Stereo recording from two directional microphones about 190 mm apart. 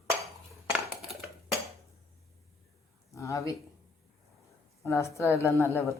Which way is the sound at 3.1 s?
15° left (ahead or behind).